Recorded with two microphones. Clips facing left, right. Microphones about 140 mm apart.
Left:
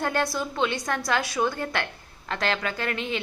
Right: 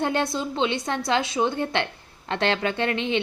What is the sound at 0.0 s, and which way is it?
Speech, 25° right (ahead or behind).